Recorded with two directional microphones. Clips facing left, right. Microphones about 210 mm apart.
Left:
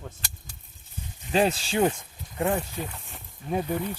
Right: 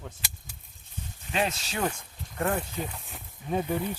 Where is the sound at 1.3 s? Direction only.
35° left (ahead or behind).